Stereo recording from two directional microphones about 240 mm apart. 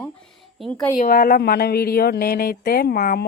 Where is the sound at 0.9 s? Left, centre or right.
Left.